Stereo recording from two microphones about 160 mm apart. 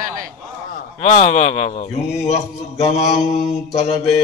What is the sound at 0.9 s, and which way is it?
Speech, 45° left (ahead or behind).